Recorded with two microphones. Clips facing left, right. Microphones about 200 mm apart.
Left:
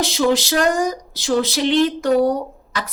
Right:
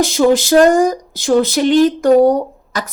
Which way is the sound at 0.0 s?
50° right (ahead or behind).